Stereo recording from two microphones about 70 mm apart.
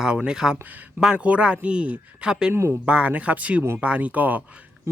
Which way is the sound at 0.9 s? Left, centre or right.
Centre.